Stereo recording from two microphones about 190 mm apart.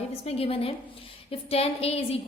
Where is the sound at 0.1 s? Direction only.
30° left (ahead or behind).